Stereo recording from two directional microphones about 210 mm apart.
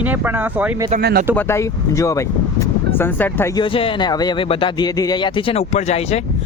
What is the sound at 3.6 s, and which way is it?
Speech, 25° left (ahead or behind).